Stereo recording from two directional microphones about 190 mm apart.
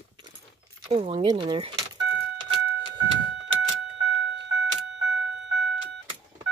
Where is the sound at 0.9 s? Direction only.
30° right (ahead or behind).